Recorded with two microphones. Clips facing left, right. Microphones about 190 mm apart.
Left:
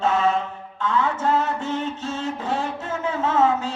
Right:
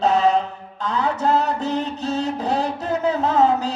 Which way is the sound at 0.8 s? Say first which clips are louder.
Right 1 dB; 40° right (ahead or behind).